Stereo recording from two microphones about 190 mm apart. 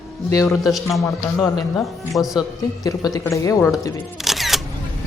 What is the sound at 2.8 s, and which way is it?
Speech, 20° left (ahead or behind).